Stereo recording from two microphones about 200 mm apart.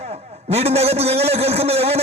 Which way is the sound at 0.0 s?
30° right (ahead or behind).